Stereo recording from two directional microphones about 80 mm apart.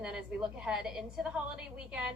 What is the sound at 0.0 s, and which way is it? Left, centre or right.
A woman's voice, centre.